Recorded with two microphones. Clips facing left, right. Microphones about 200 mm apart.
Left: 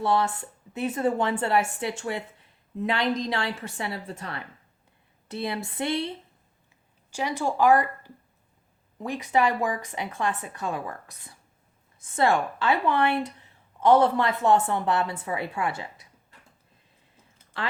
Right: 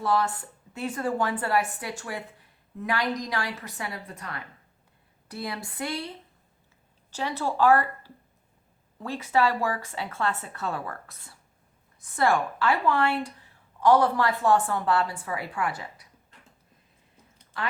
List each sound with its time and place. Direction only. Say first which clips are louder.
0.0 s a woman's voice: left 1 dB; 25° left (ahead or behind)
7.1 s a woman's voice: left 2 dB; 10° left (ahead or behind)